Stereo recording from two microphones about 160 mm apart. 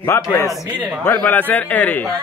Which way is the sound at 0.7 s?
10° right (ahead or behind).